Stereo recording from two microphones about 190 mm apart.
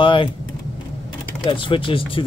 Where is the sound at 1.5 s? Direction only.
25° left (ahead or behind).